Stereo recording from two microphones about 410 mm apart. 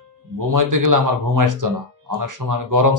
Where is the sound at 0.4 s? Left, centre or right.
Right.